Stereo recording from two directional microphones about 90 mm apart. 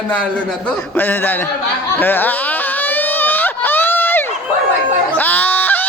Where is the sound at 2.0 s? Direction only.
20° left (ahead or behind).